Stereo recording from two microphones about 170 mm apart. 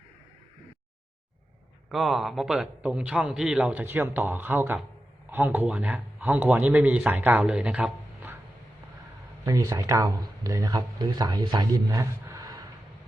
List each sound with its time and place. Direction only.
1.9 s a man's voice: centre (ahead or behind)
9.4 s speech: 20° right (ahead or behind)